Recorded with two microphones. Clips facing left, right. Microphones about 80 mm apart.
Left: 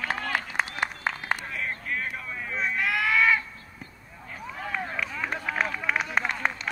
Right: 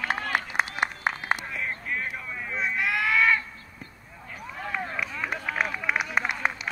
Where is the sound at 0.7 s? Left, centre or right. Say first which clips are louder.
Right 2 dB; centre.